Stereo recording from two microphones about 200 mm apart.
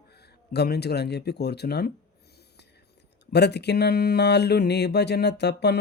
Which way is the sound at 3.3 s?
55° left (ahead or behind).